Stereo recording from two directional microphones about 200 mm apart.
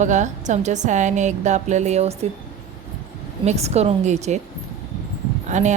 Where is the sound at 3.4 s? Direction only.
30° right (ahead or behind).